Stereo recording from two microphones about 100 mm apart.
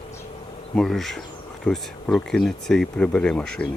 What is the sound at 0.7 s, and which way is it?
Speech, 5° left (ahead or behind).